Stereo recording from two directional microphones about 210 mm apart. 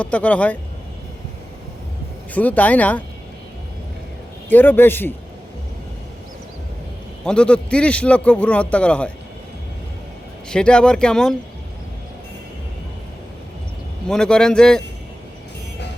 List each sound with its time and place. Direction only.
0.0 s a man's voice: 5° left (ahead or behind)
2.3 s a man's voice: 5° left (ahead or behind)
4.4 s a man's voice: 10° left (ahead or behind)
7.3 s a man's voice: 5° left (ahead or behind)
10.5 s a man's voice: 5° left (ahead or behind)
14.1 s a man's voice: 5° left (ahead or behind)